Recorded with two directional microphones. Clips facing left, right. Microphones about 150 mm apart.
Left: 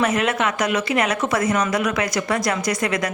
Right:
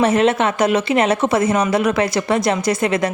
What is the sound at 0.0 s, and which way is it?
Speech, 30° right (ahead or behind).